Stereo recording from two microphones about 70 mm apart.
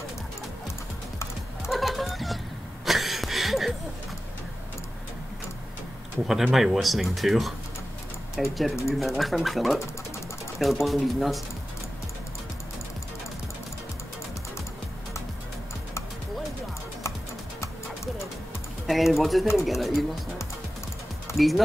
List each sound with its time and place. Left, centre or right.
1.7 s a sound: centre
6.2 s speech: centre
18.9 s speech: centre
21.4 s speech: centre